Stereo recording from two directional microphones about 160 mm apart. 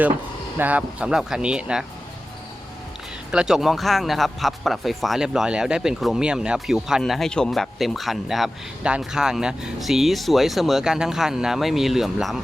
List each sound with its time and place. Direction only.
0.6 s speech: 10° right (ahead or behind)
3.3 s speech: 5° right (ahead or behind)